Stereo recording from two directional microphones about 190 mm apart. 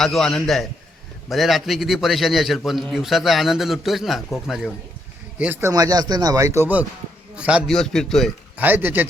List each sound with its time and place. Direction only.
0.0 s a man's voice: centre (ahead or behind)
8.5 s speech: 10° right (ahead or behind)